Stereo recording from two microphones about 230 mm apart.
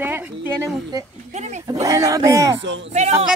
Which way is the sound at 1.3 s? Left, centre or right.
Right.